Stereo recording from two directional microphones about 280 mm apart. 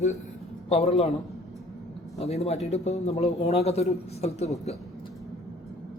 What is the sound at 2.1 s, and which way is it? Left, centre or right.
Speech, left.